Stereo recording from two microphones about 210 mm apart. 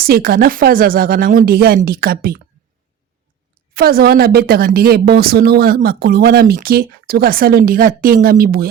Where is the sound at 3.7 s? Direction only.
45° right (ahead or behind).